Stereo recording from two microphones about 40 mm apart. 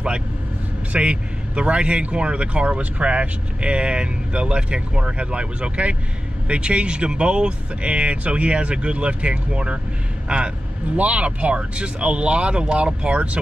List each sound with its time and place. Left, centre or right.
0.9 s a man's voice: right